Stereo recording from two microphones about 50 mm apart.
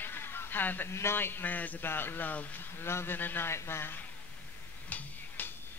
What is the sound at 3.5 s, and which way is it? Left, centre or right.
Speech, left.